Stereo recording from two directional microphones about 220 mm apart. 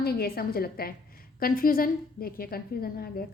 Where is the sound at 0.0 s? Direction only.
45° left (ahead or behind).